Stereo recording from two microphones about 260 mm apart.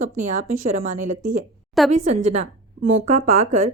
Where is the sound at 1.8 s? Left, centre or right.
Centre.